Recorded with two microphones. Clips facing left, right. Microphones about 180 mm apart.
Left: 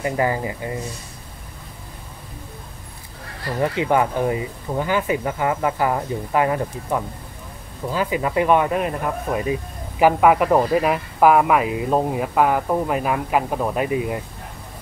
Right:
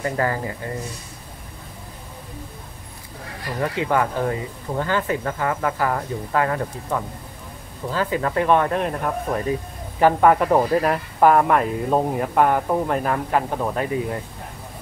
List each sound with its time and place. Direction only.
0.0 s speech: 15° left (ahead or behind)
3.6 s speech: 20° left (ahead or behind)